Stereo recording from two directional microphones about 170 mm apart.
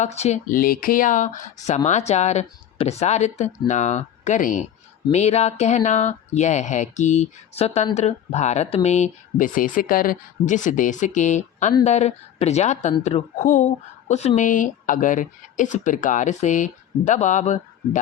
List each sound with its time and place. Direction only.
0.0 s a woman's voice: 40° left (ahead or behind)